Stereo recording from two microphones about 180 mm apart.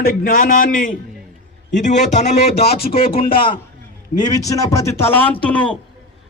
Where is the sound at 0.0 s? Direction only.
55° left (ahead or behind).